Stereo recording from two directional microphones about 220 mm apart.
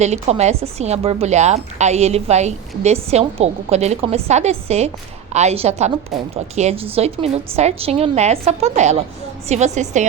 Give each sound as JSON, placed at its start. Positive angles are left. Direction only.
{"t": 0.0, "sound": "a woman's voice", "side_deg": -30}